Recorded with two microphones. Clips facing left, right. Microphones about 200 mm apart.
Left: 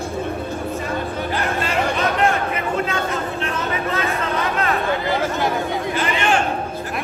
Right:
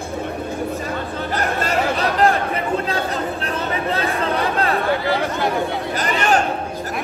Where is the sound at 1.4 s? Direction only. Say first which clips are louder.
Right 2 dB; 40° right (ahead or behind).